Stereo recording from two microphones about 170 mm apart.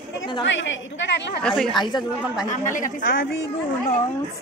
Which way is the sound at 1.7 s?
25° left (ahead or behind).